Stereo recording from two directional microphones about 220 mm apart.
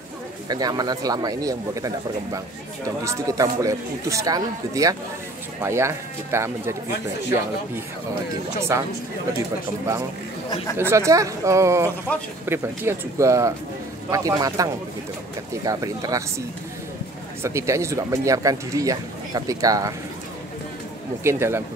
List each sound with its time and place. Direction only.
0.5 s speech: 15° right (ahead or behind)
8.5 s speech: 10° right (ahead or behind)
10.8 s speech: 10° right (ahead or behind)
21.2 s speech: 10° right (ahead or behind)